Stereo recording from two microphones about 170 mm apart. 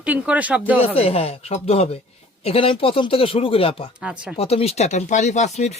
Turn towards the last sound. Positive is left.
turn(degrees=40)  # may be behind; listen again after turning